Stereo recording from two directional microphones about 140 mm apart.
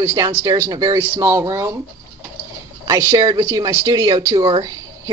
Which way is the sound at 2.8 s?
25° right (ahead or behind).